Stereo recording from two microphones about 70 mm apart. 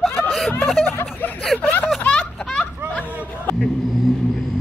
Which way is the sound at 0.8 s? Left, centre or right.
Left.